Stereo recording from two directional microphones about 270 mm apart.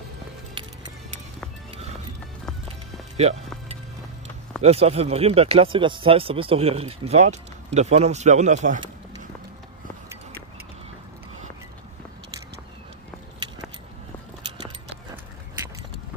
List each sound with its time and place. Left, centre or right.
3.2 s music: right
4.6 s speech: right